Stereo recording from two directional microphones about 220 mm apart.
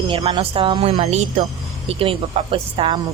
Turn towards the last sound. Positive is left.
turn(degrees=-25)  # may be behind; listen again after turning